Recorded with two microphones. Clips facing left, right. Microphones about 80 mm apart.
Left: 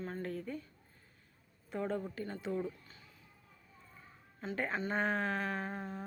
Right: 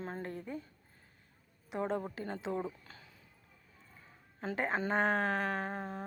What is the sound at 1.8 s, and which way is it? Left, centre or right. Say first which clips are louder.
Speech: right 2 dB; right.